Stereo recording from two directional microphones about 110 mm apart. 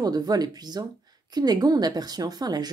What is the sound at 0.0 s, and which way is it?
Speech, 35° right (ahead or behind).